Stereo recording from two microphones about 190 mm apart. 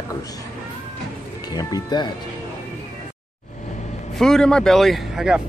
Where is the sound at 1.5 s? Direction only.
20° left (ahead or behind).